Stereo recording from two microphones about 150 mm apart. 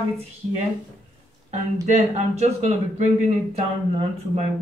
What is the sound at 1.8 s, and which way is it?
Speech, 50° right (ahead or behind).